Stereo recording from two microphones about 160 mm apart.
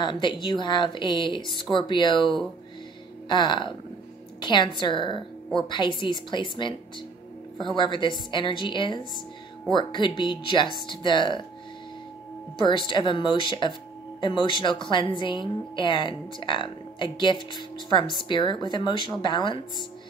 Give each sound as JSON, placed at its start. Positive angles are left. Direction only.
{"t": 0.0, "sound": "a woman's voice", "side_deg": 30}
{"t": 7.7, "sound": "a woman's voice", "side_deg": 30}
{"t": 12.5, "sound": "a woman's voice", "side_deg": 30}